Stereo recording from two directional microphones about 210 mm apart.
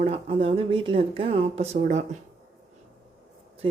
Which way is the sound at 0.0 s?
25° right (ahead or behind).